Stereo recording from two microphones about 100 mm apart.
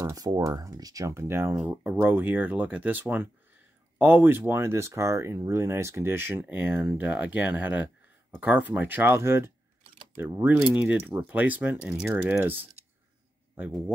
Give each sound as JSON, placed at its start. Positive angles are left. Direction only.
{"t": 0.0, "sound": "speech", "side_deg": -40}
{"t": 1.7, "sound": "speech", "side_deg": -15}
{"t": 11.8, "sound": "speech", "side_deg": -5}
{"t": 12.1, "sound": "speech", "side_deg": -25}